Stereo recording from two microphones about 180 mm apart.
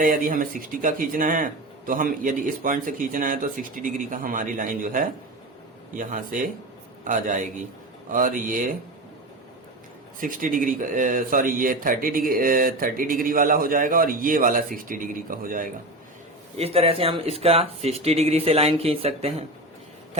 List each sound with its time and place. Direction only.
0.0 s speech: 50° right (ahead or behind)
10.2 s speech: 50° right (ahead or behind)
16.6 s speech: 35° right (ahead or behind)